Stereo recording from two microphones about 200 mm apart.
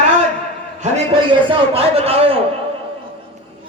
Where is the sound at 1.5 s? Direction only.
30° right (ahead or behind).